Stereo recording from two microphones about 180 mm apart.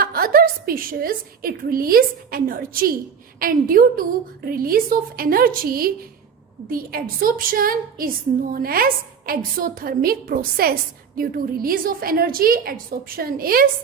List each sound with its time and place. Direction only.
0.0 s a woman's voice: 55° right (ahead or behind)